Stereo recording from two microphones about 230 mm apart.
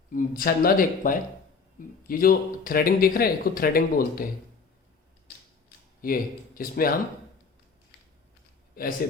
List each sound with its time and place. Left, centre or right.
0.1 s speech: left
6.0 s speech: left
8.7 s speech: left